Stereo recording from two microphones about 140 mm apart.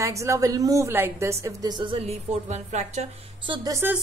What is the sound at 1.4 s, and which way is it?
Speech, 30° right (ahead or behind).